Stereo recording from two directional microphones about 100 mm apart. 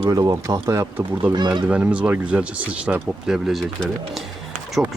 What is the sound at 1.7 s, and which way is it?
Speech, 10° right (ahead or behind).